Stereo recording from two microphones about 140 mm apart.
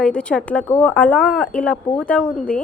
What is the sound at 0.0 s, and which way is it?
A woman's voice, 5° left (ahead or behind).